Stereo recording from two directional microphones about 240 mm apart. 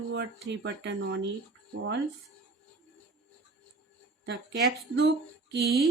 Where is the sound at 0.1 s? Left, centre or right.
Right.